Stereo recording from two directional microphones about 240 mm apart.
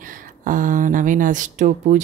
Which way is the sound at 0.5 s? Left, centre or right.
Right.